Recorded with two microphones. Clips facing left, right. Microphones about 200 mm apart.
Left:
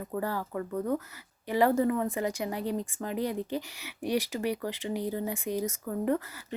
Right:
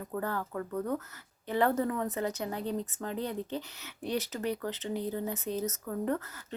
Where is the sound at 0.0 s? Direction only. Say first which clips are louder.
Left 2 dB; 10° left (ahead or behind).